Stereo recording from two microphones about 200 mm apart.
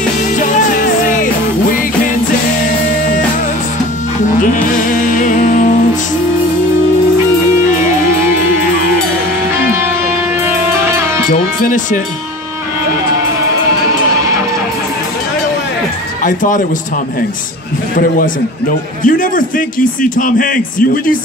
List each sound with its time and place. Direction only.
0.4 s music: 40° left (ahead or behind)
5.1 s music: 40° left (ahead or behind)
9.6 s music: 10° right (ahead or behind)
11.2 s speech: 40° left (ahead or behind)
16.2 s speech: 40° left (ahead or behind)
19.0 s a man's voice: 45° left (ahead or behind)